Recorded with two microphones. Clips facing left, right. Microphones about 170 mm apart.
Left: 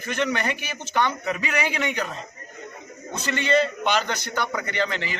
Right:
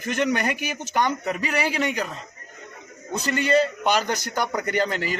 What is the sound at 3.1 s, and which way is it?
A man's voice, 35° right (ahead or behind).